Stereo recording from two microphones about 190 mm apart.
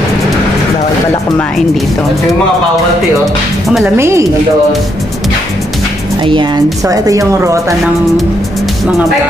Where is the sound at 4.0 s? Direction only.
15° right (ahead or behind).